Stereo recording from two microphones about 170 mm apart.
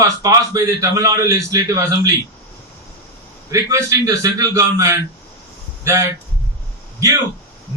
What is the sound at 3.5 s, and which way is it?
A man's voice, 15° right (ahead or behind).